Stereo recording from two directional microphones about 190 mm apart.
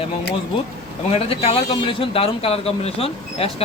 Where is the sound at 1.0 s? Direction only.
30° left (ahead or behind).